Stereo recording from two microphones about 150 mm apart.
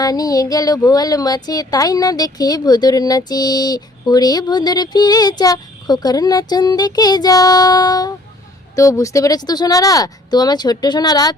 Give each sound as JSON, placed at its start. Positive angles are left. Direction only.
{"t": 0.0, "sound": "speech", "side_deg": 25}